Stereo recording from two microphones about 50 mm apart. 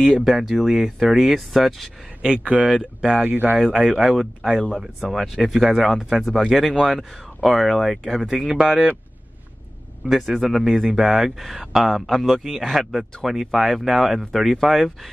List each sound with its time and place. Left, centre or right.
0.2 s speech: centre
2.2 s speech: right
3.3 s speech: right
3.7 s speech: centre
8.3 s speech: centre
10.0 s speech: centre